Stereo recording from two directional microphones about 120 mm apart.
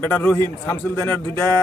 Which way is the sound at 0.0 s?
15° left (ahead or behind).